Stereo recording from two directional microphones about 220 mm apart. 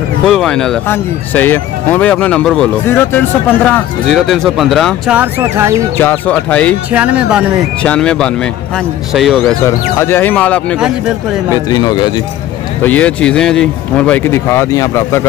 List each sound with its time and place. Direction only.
0.3 s speech: centre (ahead or behind)
5.9 s speech: 10° left (ahead or behind)
6.9 s speech: 5° right (ahead or behind)
9.9 s speech: 10° left (ahead or behind)
11.5 s speech: 20° left (ahead or behind)
12.8 s speech: 5° left (ahead or behind)